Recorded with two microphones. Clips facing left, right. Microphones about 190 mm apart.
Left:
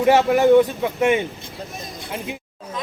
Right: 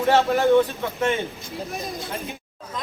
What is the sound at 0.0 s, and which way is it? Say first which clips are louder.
Speech: left 4 dB; 15° left (ahead or behind).